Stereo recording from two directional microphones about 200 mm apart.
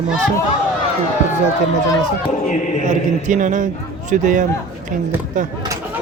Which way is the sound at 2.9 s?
40° right (ahead or behind).